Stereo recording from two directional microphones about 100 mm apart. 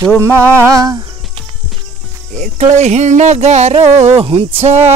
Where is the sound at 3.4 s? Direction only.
90° right.